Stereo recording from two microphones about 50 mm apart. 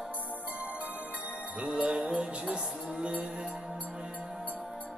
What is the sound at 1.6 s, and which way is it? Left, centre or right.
Music, centre.